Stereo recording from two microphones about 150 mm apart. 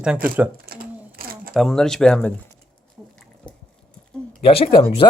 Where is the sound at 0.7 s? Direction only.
75° right (ahead or behind).